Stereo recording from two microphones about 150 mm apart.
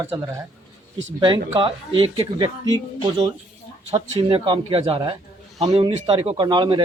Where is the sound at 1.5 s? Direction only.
35° right (ahead or behind).